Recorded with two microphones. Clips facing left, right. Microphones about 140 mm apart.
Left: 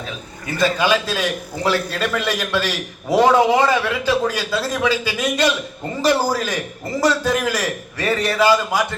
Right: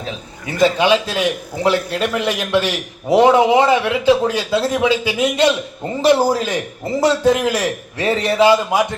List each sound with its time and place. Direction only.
0.5 s a man's voice: 20° right (ahead or behind)